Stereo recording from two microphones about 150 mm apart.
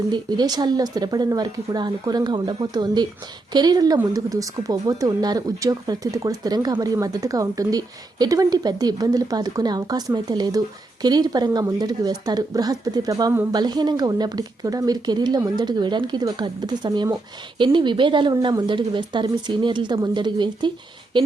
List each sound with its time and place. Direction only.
0.1 s a woman's voice: 30° right (ahead or behind)